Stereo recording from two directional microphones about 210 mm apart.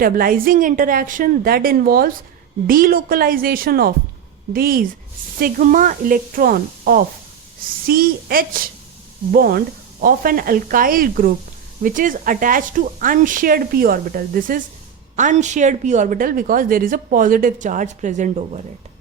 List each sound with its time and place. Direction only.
0.0 s a woman's voice: 45° right (ahead or behind)